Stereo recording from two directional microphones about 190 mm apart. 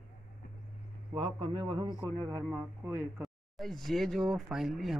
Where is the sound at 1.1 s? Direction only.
30° right (ahead or behind).